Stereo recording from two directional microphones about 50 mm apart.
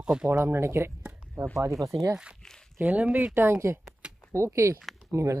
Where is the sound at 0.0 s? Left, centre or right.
Centre.